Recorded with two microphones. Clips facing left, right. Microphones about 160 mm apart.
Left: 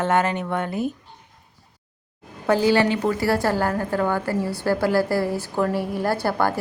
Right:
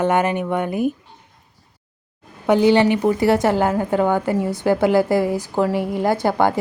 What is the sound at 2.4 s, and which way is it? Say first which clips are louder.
A woman's voice: right 4 dB; 20° right (ahead or behind).